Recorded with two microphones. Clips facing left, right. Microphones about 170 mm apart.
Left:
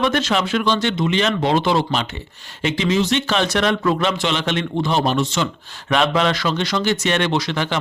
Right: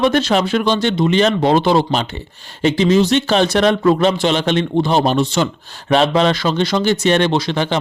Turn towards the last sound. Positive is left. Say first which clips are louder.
# right 4 dB
turn(degrees=-30)  # may be behind; listen again after turning